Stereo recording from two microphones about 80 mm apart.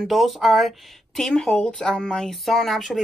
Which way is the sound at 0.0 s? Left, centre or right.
Centre.